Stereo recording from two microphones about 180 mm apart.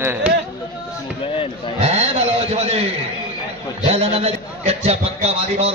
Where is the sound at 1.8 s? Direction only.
35° right (ahead or behind).